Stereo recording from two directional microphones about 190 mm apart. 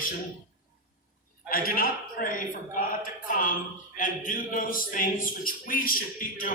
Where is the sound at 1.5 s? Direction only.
50° left (ahead or behind).